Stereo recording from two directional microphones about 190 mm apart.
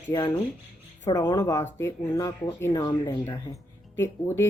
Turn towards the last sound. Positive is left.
turn(degrees=15)  # may be behind; listen again after turning